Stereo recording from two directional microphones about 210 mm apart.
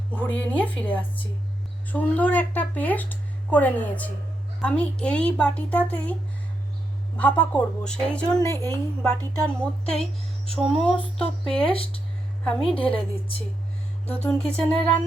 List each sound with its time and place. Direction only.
0.2 s a child's voice: 10° left (ahead or behind)
7.2 s a child's voice: 5° left (ahead or behind)
9.6 s a child's voice: 5° left (ahead or behind)
11.6 s a woman's voice: 25° left (ahead or behind)
12.5 s a child's voice: 5° left (ahead or behind)
12.7 s a woman's voice: 25° left (ahead or behind)
14.2 s speech: 5° left (ahead or behind)